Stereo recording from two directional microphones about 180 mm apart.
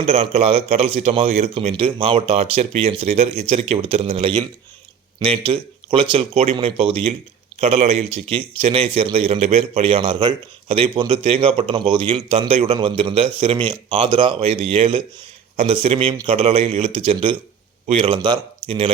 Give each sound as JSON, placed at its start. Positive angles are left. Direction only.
{"t": 0.0, "sound": "a man's voice", "side_deg": -35}